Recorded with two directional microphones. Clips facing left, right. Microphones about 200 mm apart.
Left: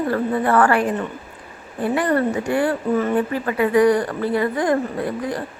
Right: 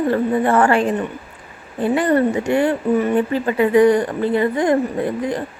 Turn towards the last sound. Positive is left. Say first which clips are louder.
# right 3 dB
turn(degrees=-20)  # may be behind; listen again after turning